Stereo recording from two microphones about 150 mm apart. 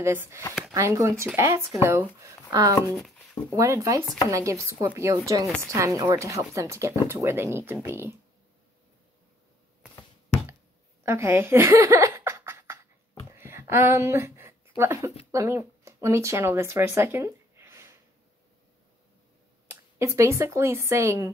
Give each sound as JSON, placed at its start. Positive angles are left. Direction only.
{"t": 0.0, "sound": "speech", "side_deg": -15}
{"t": 3.5, "sound": "speech", "side_deg": -20}
{"t": 11.1, "sound": "a sound", "side_deg": -15}
{"t": 14.8, "sound": "speech", "side_deg": -20}
{"t": 19.7, "sound": "speech", "side_deg": -20}